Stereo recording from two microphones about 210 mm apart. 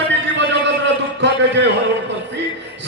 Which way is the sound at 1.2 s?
55° right (ahead or behind).